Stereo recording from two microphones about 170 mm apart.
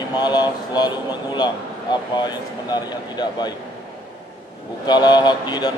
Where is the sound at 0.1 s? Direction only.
25° left (ahead or behind).